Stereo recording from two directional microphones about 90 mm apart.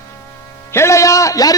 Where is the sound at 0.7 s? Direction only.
30° left (ahead or behind).